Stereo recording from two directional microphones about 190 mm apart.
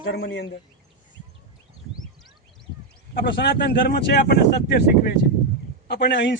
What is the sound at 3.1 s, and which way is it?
Speech, 60° left (ahead or behind).